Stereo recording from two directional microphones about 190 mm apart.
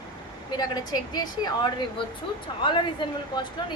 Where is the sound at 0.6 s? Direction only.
20° left (ahead or behind).